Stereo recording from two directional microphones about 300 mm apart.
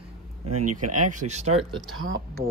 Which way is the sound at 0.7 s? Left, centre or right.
Right.